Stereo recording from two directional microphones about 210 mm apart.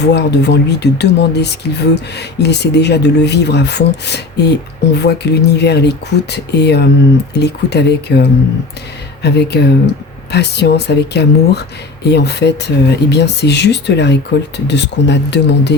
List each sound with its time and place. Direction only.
0.0 s speech: 50° left (ahead or behind)